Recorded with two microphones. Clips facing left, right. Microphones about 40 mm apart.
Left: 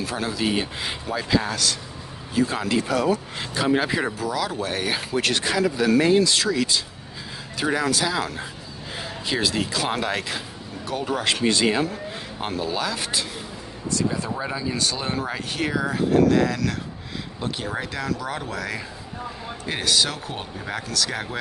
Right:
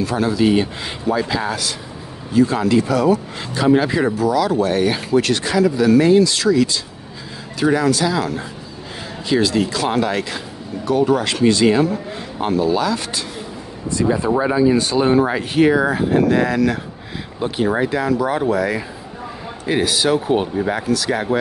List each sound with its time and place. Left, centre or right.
0.0 s speech: centre
2.3 s speech: centre
5.2 s speech: centre
11.2 s speech: centre
11.6 s speech: centre
14.0 s speech: centre